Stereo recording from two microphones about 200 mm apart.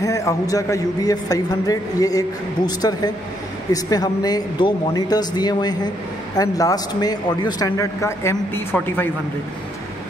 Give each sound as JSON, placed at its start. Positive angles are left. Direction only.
{"t": 0.0, "sound": "a man's voice", "side_deg": 15}